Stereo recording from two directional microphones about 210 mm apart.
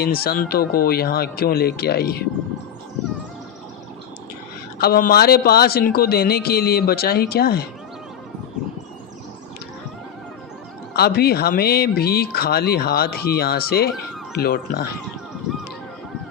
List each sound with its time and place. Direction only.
0.0 s speech: 45° left (ahead or behind)
4.8 s speech: 45° left (ahead or behind)
10.9 s speech: 50° left (ahead or behind)